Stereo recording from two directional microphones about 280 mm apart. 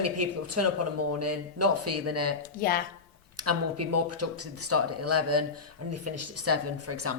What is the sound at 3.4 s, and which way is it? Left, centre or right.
Speech, right.